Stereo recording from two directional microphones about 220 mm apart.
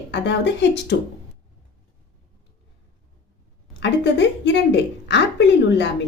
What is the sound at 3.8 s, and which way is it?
A woman's voice, 55° left (ahead or behind).